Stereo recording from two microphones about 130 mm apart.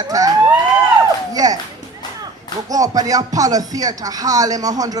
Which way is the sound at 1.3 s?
30° right (ahead or behind).